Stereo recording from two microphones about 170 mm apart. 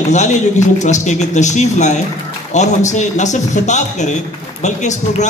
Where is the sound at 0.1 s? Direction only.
45° left (ahead or behind).